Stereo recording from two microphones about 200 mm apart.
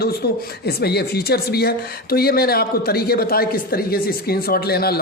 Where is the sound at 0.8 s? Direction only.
55° left (ahead or behind).